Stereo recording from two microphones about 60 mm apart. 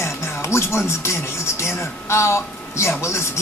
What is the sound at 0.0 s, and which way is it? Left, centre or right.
Music, left.